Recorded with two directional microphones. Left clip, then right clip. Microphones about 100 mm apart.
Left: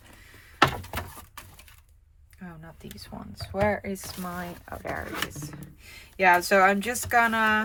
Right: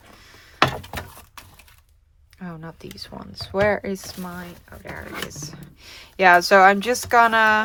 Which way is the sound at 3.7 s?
70° right (ahead or behind).